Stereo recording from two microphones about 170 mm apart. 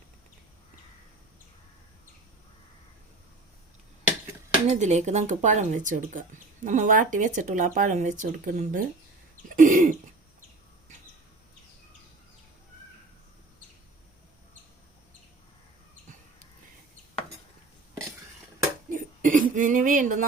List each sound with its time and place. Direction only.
4.7 s speech: 40° right (ahead or behind)
9.5 s throat clearing: 55° right (ahead or behind)
18.9 s a sound: 50° right (ahead or behind)